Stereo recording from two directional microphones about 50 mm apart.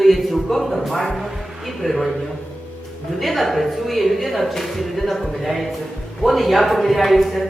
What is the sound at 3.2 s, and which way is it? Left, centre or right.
Speech, centre.